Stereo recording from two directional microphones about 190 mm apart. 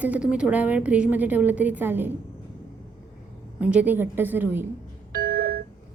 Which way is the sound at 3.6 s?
5° right (ahead or behind).